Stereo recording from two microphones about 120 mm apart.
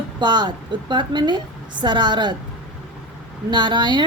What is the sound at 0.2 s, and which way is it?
A woman's voice, 40° right (ahead or behind).